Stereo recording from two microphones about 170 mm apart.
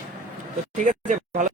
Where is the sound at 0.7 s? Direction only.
50° right (ahead or behind).